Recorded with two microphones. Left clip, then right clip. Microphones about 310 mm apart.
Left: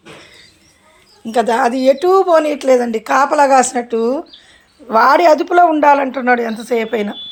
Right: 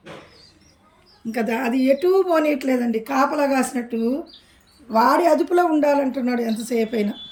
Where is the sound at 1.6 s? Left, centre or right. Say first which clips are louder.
Left 9 dB; left.